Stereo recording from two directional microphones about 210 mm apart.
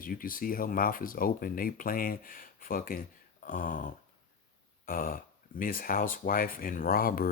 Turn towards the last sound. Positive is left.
turn(degrees=45)  # may be behind; listen again after turning